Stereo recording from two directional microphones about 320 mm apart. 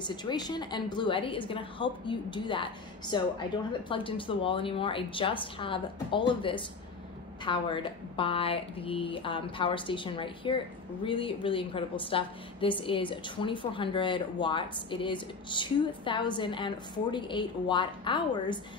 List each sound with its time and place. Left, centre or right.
0.0 s a woman's voice: centre